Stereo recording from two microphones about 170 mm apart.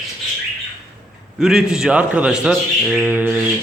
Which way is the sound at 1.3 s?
Centre (ahead or behind).